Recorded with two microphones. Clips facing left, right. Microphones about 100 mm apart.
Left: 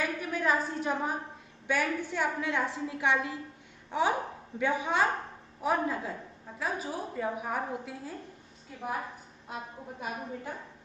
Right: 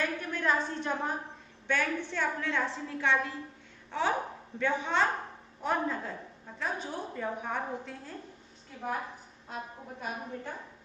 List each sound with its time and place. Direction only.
0.0 s a sound: 10° left (ahead or behind)
1.7 s a woman's voice: 10° left (ahead or behind)
9.5 s a woman's voice: 10° left (ahead or behind)